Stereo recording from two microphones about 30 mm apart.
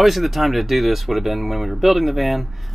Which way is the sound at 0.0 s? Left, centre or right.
Centre.